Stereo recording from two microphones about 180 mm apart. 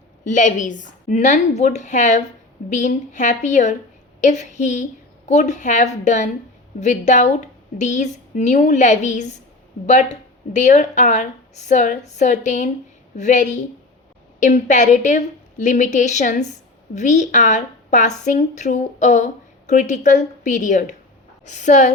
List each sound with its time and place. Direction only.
0.3 s a woman's voice: 45° left (ahead or behind)